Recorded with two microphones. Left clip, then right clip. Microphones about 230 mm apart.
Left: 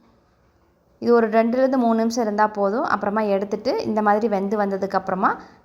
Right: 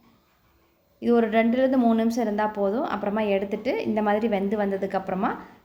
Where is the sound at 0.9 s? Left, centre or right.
Centre.